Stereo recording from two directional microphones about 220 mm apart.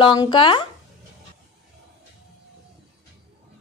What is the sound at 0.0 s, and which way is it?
Speech, 20° left (ahead or behind).